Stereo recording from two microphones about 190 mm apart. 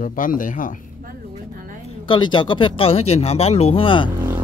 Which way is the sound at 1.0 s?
45° right (ahead or behind).